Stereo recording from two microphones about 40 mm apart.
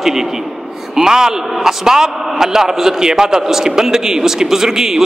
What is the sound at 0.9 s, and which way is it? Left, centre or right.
A man's voice, centre.